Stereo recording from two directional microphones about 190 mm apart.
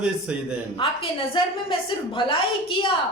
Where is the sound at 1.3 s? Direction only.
25° left (ahead or behind).